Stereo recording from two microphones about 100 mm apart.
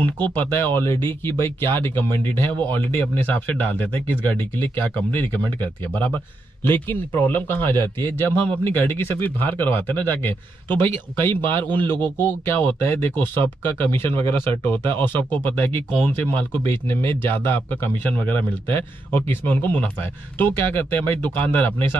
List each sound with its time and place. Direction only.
0.0 s a man's voice: 15° left (ahead or behind)